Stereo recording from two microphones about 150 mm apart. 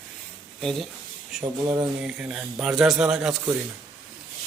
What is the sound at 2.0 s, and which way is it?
Speech, 5° right (ahead or behind).